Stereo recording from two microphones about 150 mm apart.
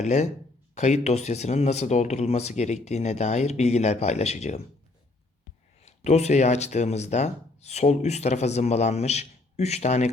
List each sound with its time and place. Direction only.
0.0 s speech: 50° left (ahead or behind)
5.8 s speech: 45° left (ahead or behind)